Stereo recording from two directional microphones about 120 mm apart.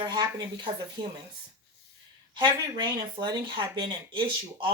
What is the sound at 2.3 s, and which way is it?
Speech, 40° right (ahead or behind).